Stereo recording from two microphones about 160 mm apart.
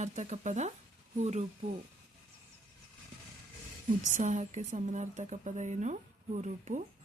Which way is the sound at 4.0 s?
50° right (ahead or behind).